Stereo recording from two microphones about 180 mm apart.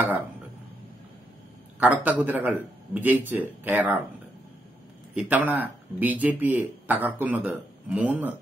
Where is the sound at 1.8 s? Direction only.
10° right (ahead or behind).